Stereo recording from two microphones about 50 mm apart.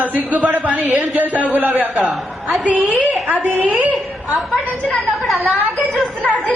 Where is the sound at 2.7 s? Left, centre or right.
Right.